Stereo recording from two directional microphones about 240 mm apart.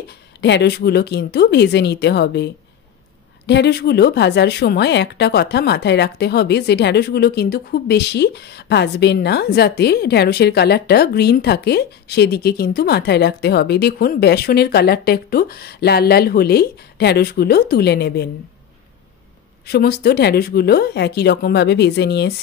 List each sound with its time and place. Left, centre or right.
0.4 s speech: left
19.6 s speech: left